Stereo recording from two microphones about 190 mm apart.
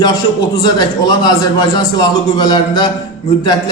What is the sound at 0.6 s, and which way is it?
A man's voice, 20° left (ahead or behind).